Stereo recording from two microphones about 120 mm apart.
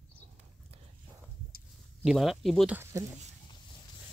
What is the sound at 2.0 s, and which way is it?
Speech, centre (ahead or behind).